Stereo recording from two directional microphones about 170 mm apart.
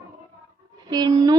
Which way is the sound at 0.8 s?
25° right (ahead or behind).